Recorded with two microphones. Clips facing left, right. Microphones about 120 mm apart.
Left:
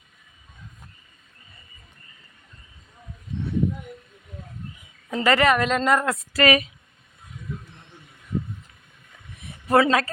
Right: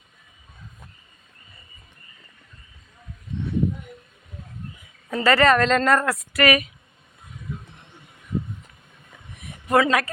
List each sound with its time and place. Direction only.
5.1 s a woman's voice: 15° left (ahead or behind)
6.1 s a woman's voice: 25° left (ahead or behind)
9.4 s a sound: 30° left (ahead or behind)